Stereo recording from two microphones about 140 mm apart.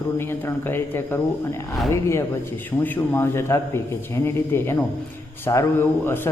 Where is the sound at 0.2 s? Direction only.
15° left (ahead or behind).